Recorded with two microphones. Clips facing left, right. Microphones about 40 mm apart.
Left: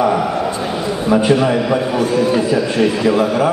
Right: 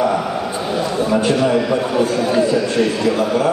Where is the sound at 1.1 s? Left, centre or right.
Centre.